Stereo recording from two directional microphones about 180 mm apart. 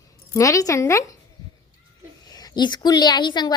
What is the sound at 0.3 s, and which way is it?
Speech, 20° left (ahead or behind).